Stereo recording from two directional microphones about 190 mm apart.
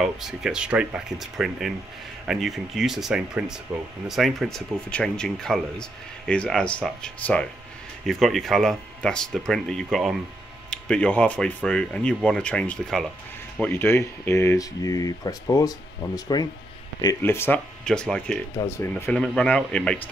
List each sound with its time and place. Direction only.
0.0 s speech: 5° right (ahead or behind)